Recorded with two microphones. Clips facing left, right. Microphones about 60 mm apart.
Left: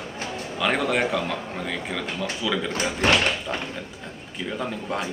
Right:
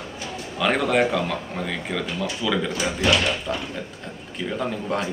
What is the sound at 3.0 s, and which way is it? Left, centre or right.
Speech, left.